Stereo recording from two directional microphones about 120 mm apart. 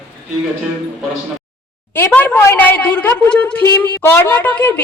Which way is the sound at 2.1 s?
15° left (ahead or behind).